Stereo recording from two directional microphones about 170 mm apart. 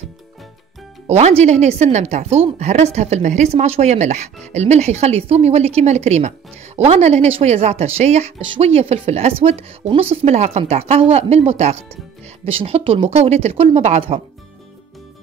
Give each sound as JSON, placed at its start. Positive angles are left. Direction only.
{"t": 1.0, "sound": "speech", "side_deg": -40}